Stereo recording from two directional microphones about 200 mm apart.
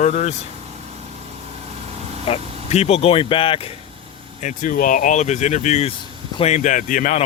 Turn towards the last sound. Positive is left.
turn(degrees=40)  # may be behind; listen again after turning